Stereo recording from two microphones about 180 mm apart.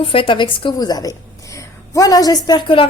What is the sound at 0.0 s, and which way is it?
A woman's voice, 30° left (ahead or behind).